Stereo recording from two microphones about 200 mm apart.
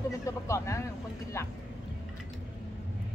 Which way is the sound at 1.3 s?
15° left (ahead or behind).